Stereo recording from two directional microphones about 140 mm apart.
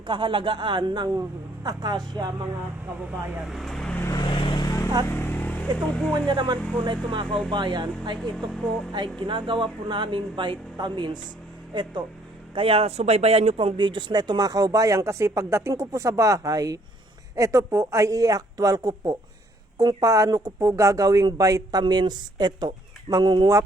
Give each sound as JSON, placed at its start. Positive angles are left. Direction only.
{"t": 0.1, "sound": "speech", "side_deg": -35}
{"t": 3.1, "sound": "speech", "side_deg": 0}
{"t": 4.0, "sound": "vehicle", "side_deg": 25}
{"t": 5.0, "sound": "vehicle", "side_deg": 15}
{"t": 6.2, "sound": "speech", "side_deg": -35}
{"t": 9.2, "sound": "speech", "side_deg": -35}
{"t": 12.5, "sound": "speech", "side_deg": -45}